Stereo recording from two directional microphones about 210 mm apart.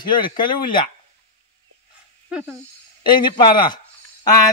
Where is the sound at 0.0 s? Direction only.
20° left (ahead or behind).